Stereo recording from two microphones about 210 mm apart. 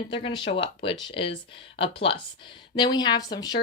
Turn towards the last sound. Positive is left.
turn(degrees=20)  # may be behind; listen again after turning